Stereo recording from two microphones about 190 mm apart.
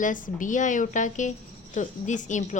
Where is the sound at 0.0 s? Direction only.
45° left (ahead or behind).